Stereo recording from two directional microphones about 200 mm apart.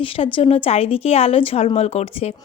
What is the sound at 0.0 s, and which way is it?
A woman's voice, 25° left (ahead or behind).